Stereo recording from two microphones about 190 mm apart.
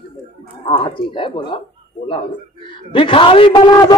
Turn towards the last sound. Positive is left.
turn(degrees=25)  # may be behind; listen again after turning